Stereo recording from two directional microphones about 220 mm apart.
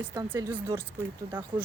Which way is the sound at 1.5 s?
25° right (ahead or behind).